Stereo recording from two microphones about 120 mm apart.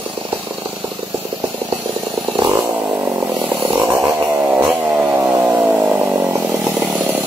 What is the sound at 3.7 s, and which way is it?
Chainsaw, 15° right (ahead or behind).